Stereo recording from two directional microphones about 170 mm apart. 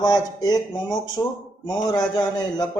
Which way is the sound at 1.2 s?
5° left (ahead or behind).